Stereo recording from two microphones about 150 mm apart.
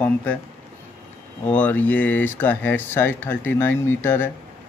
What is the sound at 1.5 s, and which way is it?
Speech, 10° left (ahead or behind).